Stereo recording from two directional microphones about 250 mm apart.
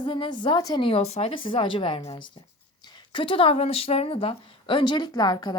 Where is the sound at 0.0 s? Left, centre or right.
Centre.